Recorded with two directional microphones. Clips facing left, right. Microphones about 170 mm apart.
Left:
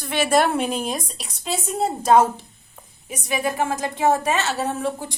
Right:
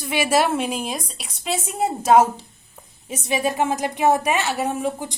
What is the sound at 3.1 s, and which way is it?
A woman's voice, 25° right (ahead or behind).